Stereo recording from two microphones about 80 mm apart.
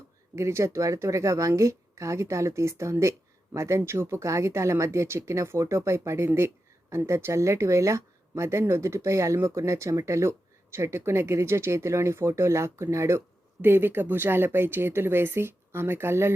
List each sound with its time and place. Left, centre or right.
0.3 s speech: right